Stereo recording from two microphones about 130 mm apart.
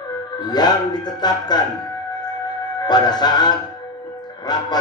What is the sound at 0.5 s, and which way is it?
A man's voice, 30° left (ahead or behind).